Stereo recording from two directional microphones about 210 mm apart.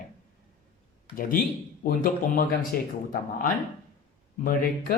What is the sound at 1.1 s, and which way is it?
Speech, 40° left (ahead or behind).